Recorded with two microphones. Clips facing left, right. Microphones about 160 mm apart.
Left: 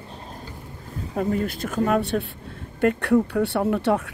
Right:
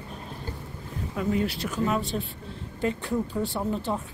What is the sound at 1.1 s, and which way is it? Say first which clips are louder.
Speech: left 3 dB; 45° left (ahead or behind).